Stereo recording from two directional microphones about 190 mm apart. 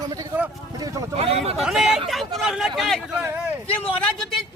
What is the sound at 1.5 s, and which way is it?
Speech, centre (ahead or behind).